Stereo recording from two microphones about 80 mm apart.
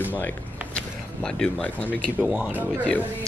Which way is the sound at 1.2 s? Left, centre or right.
Centre.